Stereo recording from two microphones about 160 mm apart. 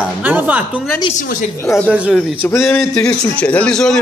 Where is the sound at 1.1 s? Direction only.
50° left (ahead or behind).